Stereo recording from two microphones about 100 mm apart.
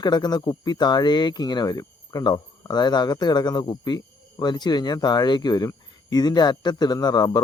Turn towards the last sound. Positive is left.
turn(degrees=45)  # may be behind; listen again after turning